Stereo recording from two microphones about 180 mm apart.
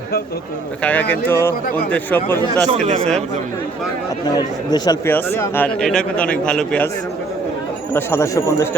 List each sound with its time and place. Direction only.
0.8 s a man's voice: 10° left (ahead or behind)
2.8 s speech: 40° right (ahead or behind)
4.4 s a man's voice: 20° left (ahead or behind); by 6.8 s 5° left (ahead or behind)
7.9 s a man's voice: 15° left (ahead or behind)